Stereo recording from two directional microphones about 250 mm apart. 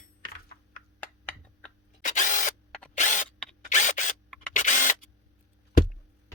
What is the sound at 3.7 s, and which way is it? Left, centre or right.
Camera, left.